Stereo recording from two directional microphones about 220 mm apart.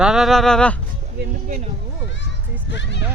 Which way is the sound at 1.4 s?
30° right (ahead or behind).